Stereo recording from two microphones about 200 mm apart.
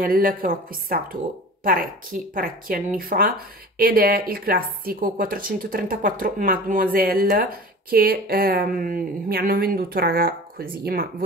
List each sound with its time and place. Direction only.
0.0 s speech: 45° right (ahead or behind)